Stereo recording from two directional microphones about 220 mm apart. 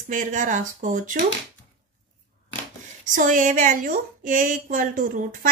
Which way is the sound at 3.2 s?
35° right (ahead or behind).